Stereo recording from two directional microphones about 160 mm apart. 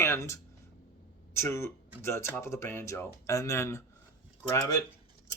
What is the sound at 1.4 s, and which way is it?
Speech, 15° left (ahead or behind).